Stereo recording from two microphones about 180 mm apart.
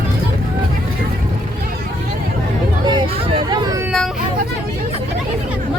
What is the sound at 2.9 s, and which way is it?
Hubbub, 30° right (ahead or behind).